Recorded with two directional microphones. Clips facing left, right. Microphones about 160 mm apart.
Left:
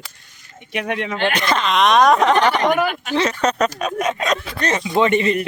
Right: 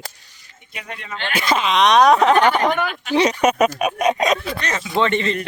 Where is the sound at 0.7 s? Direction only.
80° left.